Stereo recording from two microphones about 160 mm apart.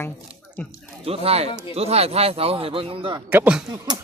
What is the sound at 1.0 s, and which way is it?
Speech, 40° right (ahead or behind).